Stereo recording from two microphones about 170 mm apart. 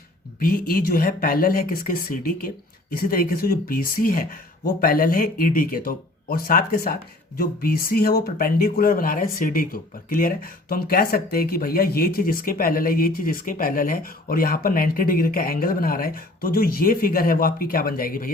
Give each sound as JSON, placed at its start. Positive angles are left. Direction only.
{"t": 0.3, "sound": "speech", "side_deg": 55}